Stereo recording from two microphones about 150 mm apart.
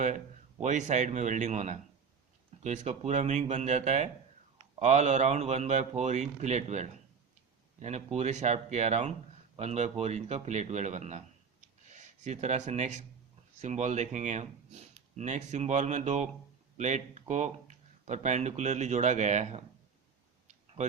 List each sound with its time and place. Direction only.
0.6 s speech: 55° right (ahead or behind)